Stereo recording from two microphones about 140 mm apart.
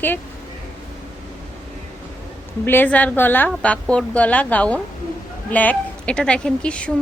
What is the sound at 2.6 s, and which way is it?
A woman's voice, 15° left (ahead or behind).